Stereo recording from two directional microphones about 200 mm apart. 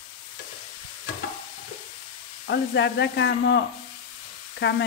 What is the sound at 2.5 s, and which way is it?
Speech, 60° left (ahead or behind).